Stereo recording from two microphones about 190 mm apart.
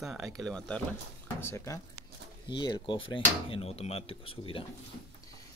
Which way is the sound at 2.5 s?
25° left (ahead or behind).